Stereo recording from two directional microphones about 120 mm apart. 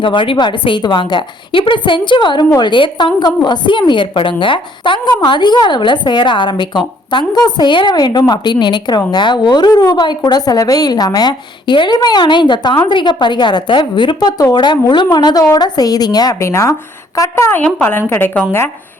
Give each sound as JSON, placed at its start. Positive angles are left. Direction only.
{"t": 0.0, "sound": "a woman's voice", "side_deg": 45}